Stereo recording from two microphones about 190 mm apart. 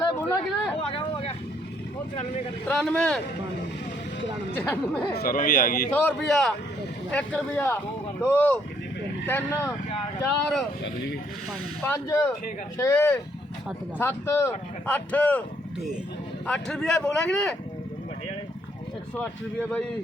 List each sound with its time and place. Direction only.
0.2 s a sound: 5° left (ahead or behind)
0.8 s vehicle: 30° left (ahead or behind)
2.6 s speech: 5° left (ahead or behind)
4.5 s speech: 10° left (ahead or behind)
5.1 s speech: 50° left (ahead or behind)
5.9 s speech: 5° left (ahead or behind)
11.8 s speech: 15° left (ahead or behind)
19.1 s speech: 5° left (ahead or behind)